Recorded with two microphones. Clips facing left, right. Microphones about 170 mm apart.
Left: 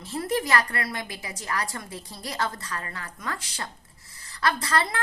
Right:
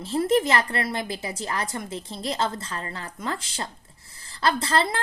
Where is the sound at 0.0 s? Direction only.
25° right (ahead or behind).